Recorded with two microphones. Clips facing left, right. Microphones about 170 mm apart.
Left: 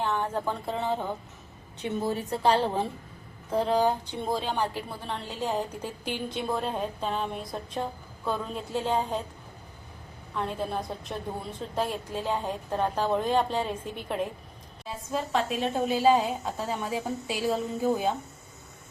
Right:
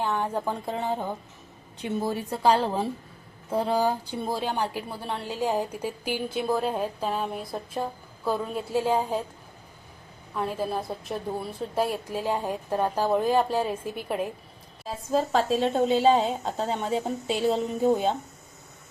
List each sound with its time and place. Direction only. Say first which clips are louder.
0.0 s speech: right 1 dB; 10° right (ahead or behind)
10.3 s a woman's voice: right 2 dB; 5° right (ahead or behind)
15.1 s a woman's voice: right 5 dB; 35° right (ahead or behind)